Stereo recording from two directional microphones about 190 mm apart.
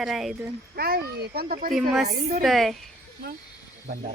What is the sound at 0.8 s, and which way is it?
Speech, 55° right (ahead or behind).